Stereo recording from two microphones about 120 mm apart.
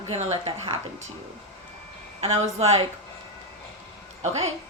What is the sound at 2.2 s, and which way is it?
Speech, 60° right (ahead or behind).